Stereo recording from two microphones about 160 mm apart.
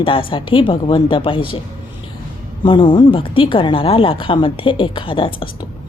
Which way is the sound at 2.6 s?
30° left (ahead or behind).